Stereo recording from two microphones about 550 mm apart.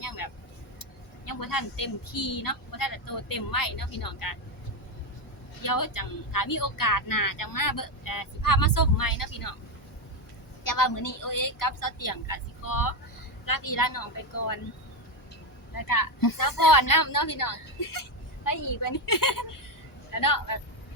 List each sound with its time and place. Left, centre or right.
0.2 s vehicle: left
0.8 s speech: left
5.6 s speech: left
10.6 s speech: left
15.7 s speech: left